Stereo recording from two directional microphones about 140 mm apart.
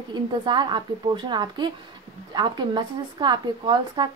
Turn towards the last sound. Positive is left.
turn(degrees=-30)  # may be behind; listen again after turning